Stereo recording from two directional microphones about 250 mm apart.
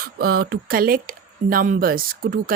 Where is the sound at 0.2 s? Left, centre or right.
Right.